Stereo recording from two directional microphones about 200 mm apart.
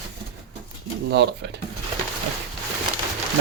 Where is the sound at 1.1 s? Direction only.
60° right (ahead or behind).